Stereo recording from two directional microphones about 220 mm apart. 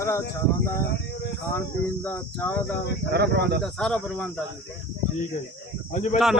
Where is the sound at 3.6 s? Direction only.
5° left (ahead or behind).